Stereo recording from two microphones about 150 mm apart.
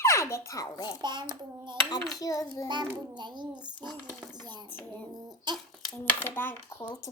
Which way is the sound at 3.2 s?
30° right (ahead or behind).